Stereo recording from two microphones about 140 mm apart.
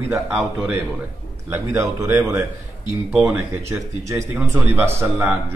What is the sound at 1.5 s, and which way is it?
Speech, 15° right (ahead or behind).